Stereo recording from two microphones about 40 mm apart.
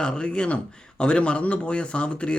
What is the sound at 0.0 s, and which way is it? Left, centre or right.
Speech, left.